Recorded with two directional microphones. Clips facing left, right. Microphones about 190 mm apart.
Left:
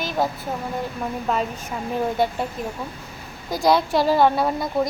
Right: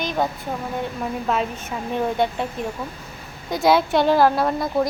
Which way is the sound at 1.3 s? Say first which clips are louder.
Even; centre (ahead or behind).